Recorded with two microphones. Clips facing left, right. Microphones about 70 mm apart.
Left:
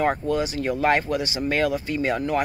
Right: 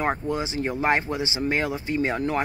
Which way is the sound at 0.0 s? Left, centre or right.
Right.